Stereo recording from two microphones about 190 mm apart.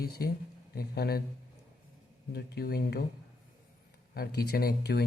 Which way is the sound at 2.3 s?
55° left (ahead or behind).